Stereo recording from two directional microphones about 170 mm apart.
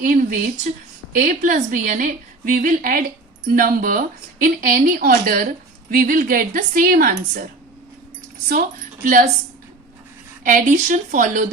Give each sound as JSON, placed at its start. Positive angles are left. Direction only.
{"t": 0.0, "sound": "a woman's voice", "side_deg": -50}
{"t": 9.0, "sound": "a woman's voice", "side_deg": -55}
{"t": 10.4, "sound": "a woman's voice", "side_deg": -50}